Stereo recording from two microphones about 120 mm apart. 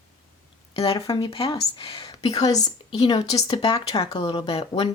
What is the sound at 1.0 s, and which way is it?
Speech, 45° left (ahead or behind).